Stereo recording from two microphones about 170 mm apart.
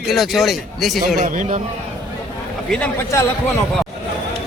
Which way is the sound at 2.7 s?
10° left (ahead or behind).